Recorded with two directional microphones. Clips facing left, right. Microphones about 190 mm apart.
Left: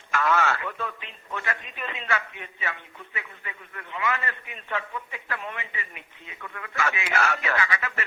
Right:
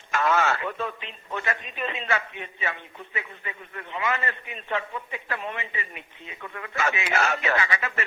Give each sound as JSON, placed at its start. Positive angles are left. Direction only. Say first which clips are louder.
{"t": 0.1, "sound": "a man's voice", "louder": "right 1 dB", "side_deg": -25}